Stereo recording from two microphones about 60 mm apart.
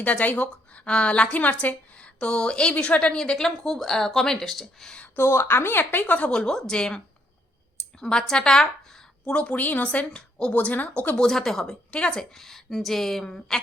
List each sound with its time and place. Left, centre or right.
0.0 s a woman's voice: left
0.4 s a woman's voice: centre
5.1 s a woman's voice: left
11.3 s a woman's voice: centre
12.4 s speech: centre